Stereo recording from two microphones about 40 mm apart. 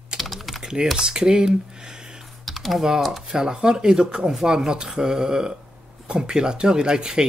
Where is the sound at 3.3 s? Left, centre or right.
Centre.